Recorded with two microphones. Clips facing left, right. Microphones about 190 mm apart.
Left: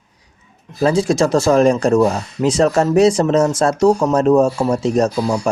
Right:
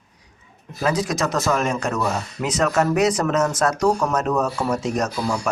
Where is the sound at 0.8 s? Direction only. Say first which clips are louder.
Left 7 dB; 30° left (ahead or behind).